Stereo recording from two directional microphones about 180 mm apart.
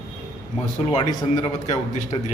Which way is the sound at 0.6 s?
40° left (ahead or behind).